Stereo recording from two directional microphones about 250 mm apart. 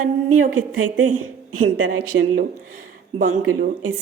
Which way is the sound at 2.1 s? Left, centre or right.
Right.